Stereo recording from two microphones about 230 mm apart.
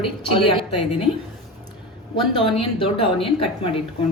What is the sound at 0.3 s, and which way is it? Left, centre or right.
Speech, left.